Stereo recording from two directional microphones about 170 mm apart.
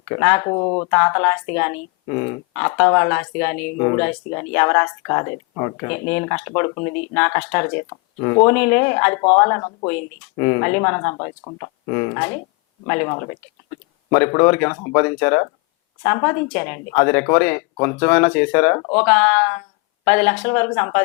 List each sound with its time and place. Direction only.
0.0 s speech: 15° left (ahead or behind)
0.5 s speech: 25° left (ahead or behind)
0.9 s speech: 15° left (ahead or behind)